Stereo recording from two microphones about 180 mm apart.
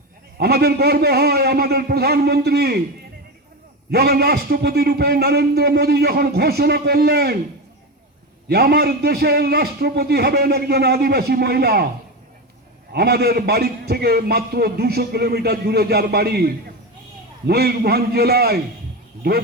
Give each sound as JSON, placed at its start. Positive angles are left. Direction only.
{"t": 0.3, "sound": "a man's voice", "side_deg": -60}
{"t": 3.9, "sound": "a man's voice", "side_deg": -60}
{"t": 8.4, "sound": "a man's voice", "side_deg": -60}
{"t": 12.9, "sound": "a man's voice", "side_deg": -60}